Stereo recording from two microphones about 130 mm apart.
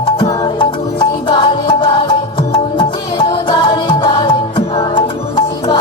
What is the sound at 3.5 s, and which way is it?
Music, 40° left (ahead or behind).